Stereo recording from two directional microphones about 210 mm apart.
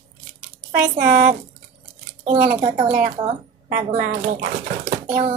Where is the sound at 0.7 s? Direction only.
40° right (ahead or behind).